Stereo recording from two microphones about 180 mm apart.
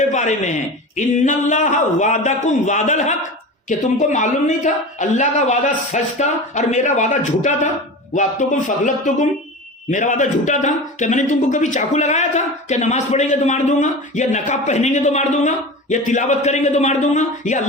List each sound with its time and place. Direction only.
0.1 s a man's voice: 40° left (ahead or behind)